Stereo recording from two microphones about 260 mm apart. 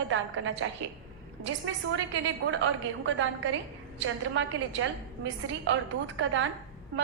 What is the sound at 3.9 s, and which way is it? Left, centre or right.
Speech, right.